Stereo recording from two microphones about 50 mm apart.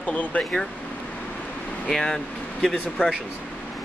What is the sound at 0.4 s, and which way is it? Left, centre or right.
Speech, centre.